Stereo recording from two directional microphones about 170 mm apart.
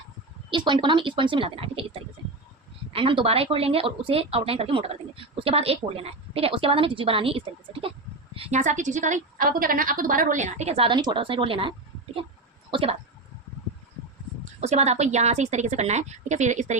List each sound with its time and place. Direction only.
0.5 s a woman's voice: 30° right (ahead or behind)
12.7 s speech: 35° right (ahead or behind)
14.6 s speech: 40° right (ahead or behind)